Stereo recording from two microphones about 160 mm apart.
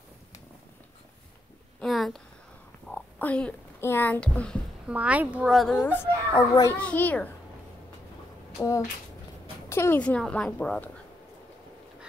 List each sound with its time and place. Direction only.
1.8 s a sound: centre (ahead or behind)
2.9 s speech: 10° left (ahead or behind)
4.8 s speech: 10° right (ahead or behind); by 6.0 s 5° left (ahead or behind)
6.3 s a child's voice: 25° left (ahead or behind)
6.7 s a woman's voice: 10° left (ahead or behind)
8.5 s a child's voice: 20° left (ahead or behind)